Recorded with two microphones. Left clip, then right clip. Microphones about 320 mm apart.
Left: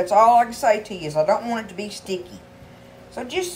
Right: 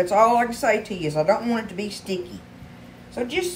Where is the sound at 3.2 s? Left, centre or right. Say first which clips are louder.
Right 1 dB; centre.